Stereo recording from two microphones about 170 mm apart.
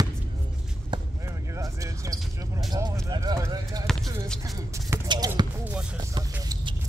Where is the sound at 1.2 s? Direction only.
20° right (ahead or behind).